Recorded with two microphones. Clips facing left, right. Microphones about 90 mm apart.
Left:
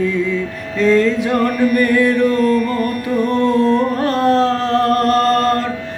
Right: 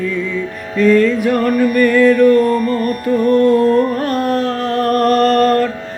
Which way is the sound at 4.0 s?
30° left (ahead or behind).